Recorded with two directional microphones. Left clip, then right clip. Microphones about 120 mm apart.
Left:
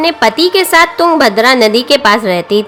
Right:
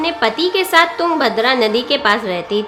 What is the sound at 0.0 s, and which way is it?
A woman's voice, 55° left (ahead or behind).